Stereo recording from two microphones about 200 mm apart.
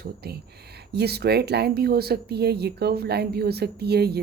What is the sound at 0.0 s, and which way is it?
A woman's voice, 50° right (ahead or behind).